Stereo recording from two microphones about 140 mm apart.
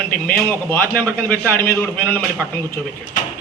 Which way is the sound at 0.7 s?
15° left (ahead or behind).